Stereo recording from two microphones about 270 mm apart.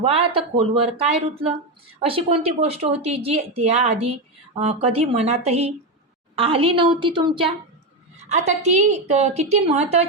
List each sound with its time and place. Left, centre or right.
0.0 s a woman's voice: right